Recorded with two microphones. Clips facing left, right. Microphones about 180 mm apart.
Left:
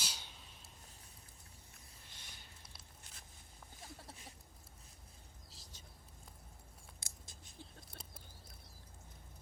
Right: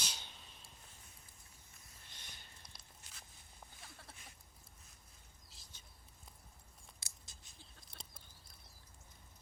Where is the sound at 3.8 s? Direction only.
35° left (ahead or behind).